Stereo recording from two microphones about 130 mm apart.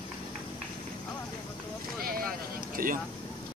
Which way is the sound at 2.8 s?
90° right.